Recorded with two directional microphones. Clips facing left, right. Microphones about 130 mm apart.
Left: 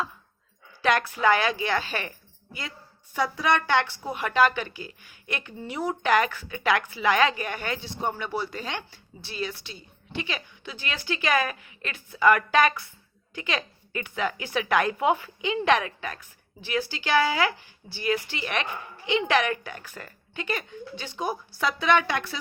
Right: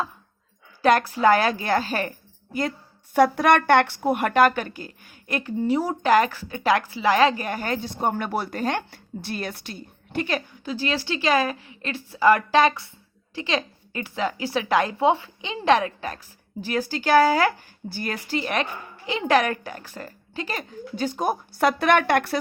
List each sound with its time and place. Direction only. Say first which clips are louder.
0.8 s a woman's voice: right 5 dB; 40° right (ahead or behind); by 22.4 s 55° right (ahead or behind)